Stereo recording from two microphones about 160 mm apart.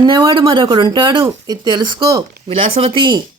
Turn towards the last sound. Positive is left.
turn(degrees=-30)  # may be behind; listen again after turning